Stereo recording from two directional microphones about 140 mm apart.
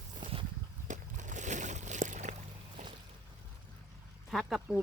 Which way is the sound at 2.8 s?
60° right (ahead or behind).